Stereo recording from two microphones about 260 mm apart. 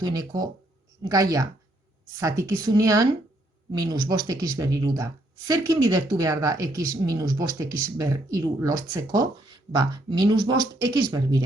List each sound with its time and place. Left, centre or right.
0.0 s speech: centre